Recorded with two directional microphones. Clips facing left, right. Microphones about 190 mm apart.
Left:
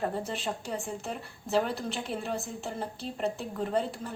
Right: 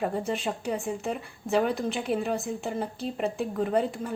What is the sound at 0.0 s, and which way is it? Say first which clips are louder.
Speech: right 4 dB; 10° right (ahead or behind).